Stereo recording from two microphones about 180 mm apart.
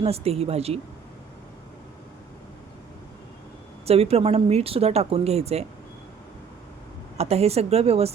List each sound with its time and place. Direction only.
0.0 s speech: 35° right (ahead or behind)
3.8 s speech: 35° right (ahead or behind)
7.2 s speech: 35° right (ahead or behind)